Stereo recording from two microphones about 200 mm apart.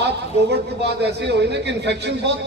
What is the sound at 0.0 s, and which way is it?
A man's voice, 55° right (ahead or behind).